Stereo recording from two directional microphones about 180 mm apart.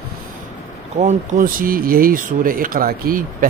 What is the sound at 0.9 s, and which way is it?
Speech, 45° right (ahead or behind).